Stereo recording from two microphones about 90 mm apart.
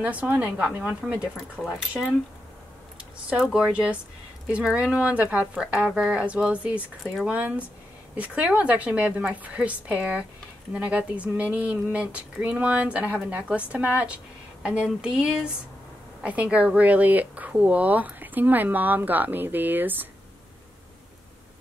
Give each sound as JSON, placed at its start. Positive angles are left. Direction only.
{"t": 0.0, "sound": "speech", "side_deg": -15}
{"t": 3.3, "sound": "speech", "side_deg": -10}